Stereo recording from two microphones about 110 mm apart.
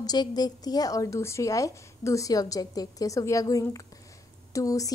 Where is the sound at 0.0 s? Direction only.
35° left (ahead or behind).